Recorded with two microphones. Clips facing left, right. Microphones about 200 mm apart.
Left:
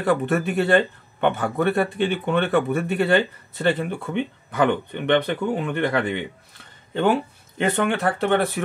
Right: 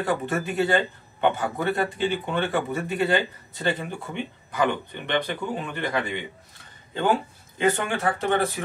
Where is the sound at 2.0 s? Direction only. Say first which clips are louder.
Left 4 dB; 60° left (ahead or behind).